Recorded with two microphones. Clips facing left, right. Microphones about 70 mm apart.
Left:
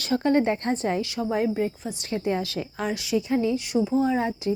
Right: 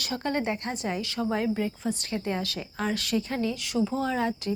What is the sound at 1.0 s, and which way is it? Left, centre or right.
A woman's voice, left.